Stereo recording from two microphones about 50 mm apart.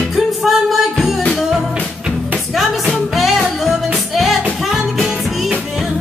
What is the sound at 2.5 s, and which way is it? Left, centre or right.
Music, centre.